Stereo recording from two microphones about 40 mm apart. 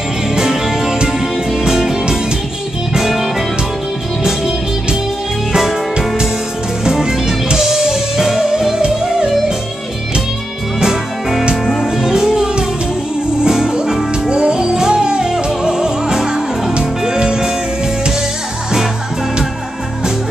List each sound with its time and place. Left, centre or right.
0.3 s music: centre
4.2 s music: centre
6.8 s music: centre
10.8 s music: centre
12.3 s music: right